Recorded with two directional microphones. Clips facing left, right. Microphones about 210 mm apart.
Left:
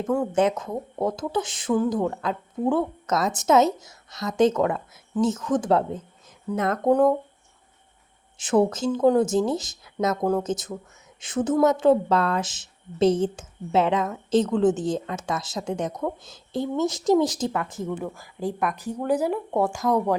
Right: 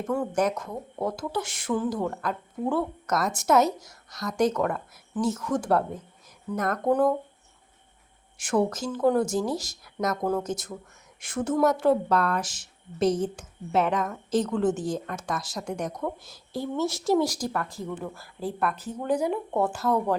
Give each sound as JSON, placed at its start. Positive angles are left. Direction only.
{"t": 0.1, "sound": "a woman's voice", "side_deg": 20}
{"t": 8.4, "sound": "a woman's voice", "side_deg": 25}